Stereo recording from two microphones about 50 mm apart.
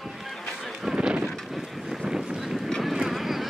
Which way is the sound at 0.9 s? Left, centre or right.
Centre.